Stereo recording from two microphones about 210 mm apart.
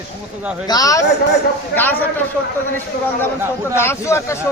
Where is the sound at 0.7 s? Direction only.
15° left (ahead or behind).